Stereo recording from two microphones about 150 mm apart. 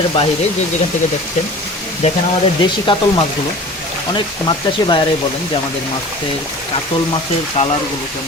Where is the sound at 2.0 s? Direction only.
50° left (ahead or behind).